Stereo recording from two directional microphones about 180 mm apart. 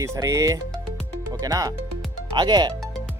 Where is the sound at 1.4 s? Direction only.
20° right (ahead or behind).